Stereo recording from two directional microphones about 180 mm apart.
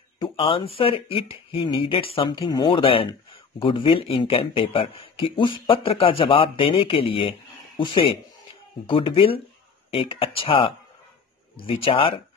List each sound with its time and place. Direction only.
0.2 s speech: 30° left (ahead or behind)